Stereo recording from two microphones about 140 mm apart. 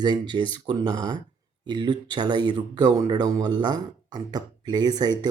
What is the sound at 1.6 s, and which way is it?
Speech, 30° right (ahead or behind).